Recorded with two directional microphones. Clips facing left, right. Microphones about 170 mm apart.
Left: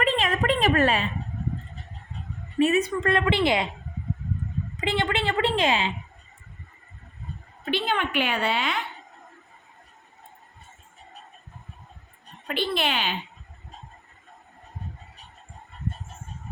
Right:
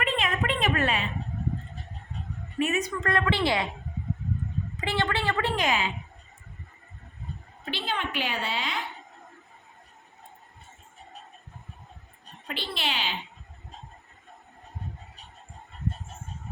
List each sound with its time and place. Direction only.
0.0 s a sound: 40° left (ahead or behind)
2.6 s a woman's voice: 30° left (ahead or behind)
4.8 s a woman's voice: 20° left (ahead or behind)
7.6 s a woman's voice: 60° left (ahead or behind)
12.5 s a woman's voice: 55° left (ahead or behind)